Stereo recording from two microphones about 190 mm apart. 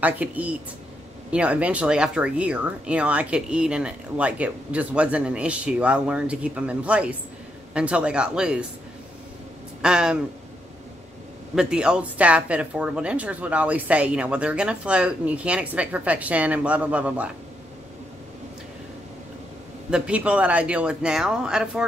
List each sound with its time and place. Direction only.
0.0 s speech: 10° right (ahead or behind)
9.8 s speech: 5° right (ahead or behind)
11.5 s speech: 5° right (ahead or behind)
19.9 s speech: 5° right (ahead or behind)